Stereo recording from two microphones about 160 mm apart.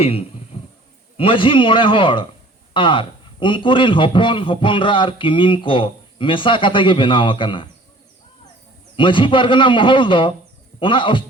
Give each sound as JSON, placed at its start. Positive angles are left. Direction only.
{"t": 0.0, "sound": "a man's voice", "side_deg": 35}
{"t": 0.5, "sound": "a sound", "side_deg": 40}
{"t": 1.1, "sound": "a man's voice", "side_deg": 35}
{"t": 9.0, "sound": "a man's voice", "side_deg": 30}